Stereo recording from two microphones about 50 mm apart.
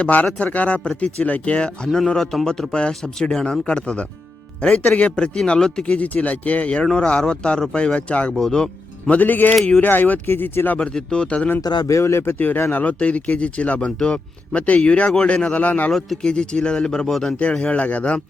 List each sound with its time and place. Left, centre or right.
0.0 s speech: left
2.0 s speech: centre
5.8 s speech: left
8.4 s speech: centre
9.0 s speech: left
10.2 s speech: left
10.8 s speech: left
11.9 s speech: left
12.2 s speech: left
12.7 s speech: left
15.9 s speech: centre; by 18.2 s left